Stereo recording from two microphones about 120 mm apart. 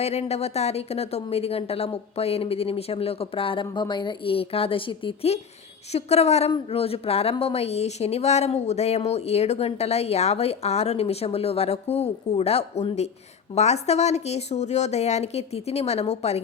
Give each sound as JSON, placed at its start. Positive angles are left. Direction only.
{"t": 0.0, "sound": "a woman's voice", "side_deg": 60}
{"t": 5.9, "sound": "a woman's voice", "side_deg": 60}